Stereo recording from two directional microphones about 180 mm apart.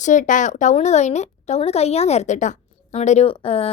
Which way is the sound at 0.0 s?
45° left (ahead or behind).